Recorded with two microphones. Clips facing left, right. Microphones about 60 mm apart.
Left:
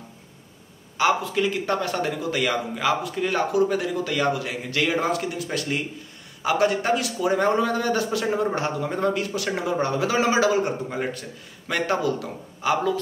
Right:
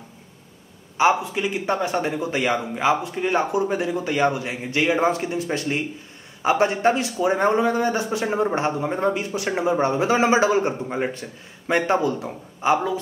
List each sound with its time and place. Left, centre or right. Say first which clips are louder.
0.9 s a man's voice: right 2 dB; right